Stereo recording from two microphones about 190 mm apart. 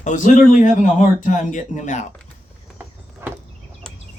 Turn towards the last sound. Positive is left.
turn(degrees=-15)  # may be behind; listen again after turning